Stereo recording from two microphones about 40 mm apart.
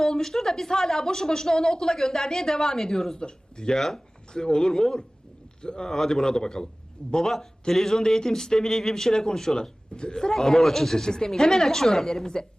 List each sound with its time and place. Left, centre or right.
0.0 s a woman's voice: centre
3.2 s a woman's voice: left